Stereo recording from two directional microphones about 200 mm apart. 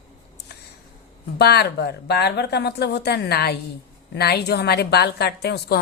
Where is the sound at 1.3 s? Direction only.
55° left (ahead or behind).